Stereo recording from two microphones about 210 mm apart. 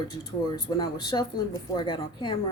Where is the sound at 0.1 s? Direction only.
20° left (ahead or behind).